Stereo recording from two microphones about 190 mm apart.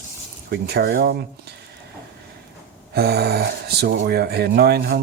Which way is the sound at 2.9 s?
55° right (ahead or behind).